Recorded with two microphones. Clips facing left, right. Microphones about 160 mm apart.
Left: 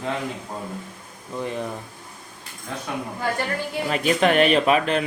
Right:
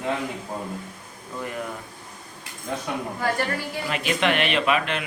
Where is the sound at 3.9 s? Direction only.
40° left (ahead or behind).